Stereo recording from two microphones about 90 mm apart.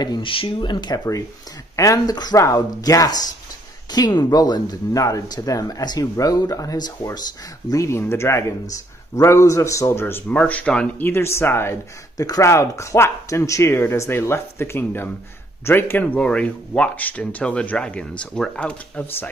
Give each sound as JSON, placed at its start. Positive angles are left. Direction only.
{"t": 0.2, "sound": "speech", "side_deg": 75}
{"t": 1.8, "sound": "speech", "side_deg": 40}
{"t": 7.7, "sound": "speech", "side_deg": 30}
{"t": 10.2, "sound": "speech", "side_deg": 15}
{"t": 11.1, "sound": "speech", "side_deg": 30}
{"t": 12.2, "sound": "speech", "side_deg": 35}